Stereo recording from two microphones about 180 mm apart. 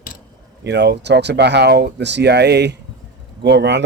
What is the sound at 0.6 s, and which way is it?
Speech, 70° right (ahead or behind).